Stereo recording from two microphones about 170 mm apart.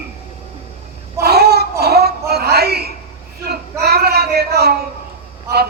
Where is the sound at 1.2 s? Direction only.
70° right (ahead or behind).